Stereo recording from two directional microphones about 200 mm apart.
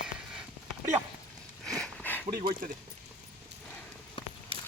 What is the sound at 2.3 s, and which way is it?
Speech, 45° right (ahead or behind).